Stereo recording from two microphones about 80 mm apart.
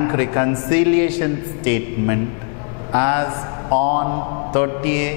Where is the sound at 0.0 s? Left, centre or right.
Centre.